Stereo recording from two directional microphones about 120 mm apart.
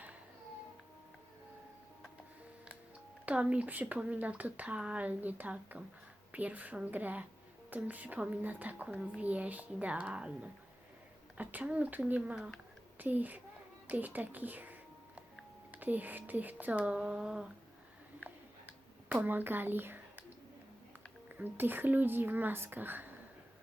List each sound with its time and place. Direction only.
3.2 s a woman's voice: 10° right (ahead or behind)
13.8 s music: 15° right (ahead or behind)
15.7 s a woman's voice: 15° right (ahead or behind)
19.0 s speech: 15° right (ahead or behind)
21.2 s a woman's voice: 15° right (ahead or behind)